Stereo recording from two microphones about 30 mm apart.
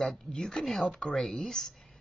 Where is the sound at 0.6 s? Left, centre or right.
Centre.